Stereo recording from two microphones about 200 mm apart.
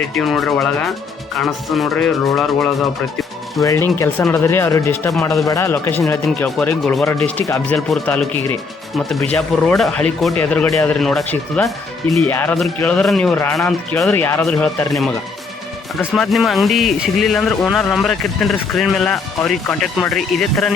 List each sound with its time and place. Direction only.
0.1 s speech: centre (ahead or behind)
3.6 s speech: 15° left (ahead or behind)
7.9 s speech: 5° left (ahead or behind)